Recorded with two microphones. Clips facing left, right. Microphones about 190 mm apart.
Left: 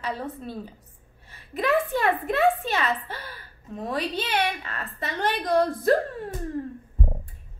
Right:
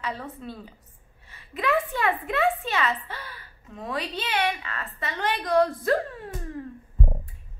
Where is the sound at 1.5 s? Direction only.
35° left (ahead or behind).